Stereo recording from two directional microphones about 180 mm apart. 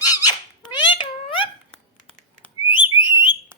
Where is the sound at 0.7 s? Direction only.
25° left (ahead or behind).